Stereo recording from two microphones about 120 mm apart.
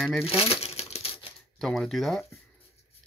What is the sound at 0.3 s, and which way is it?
Crumpling, 55° left (ahead or behind).